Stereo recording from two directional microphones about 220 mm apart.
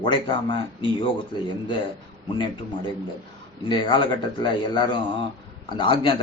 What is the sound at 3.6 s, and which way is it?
Speech, 20° left (ahead or behind).